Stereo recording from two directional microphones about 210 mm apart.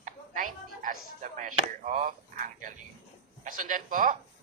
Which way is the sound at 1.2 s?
40° right (ahead or behind).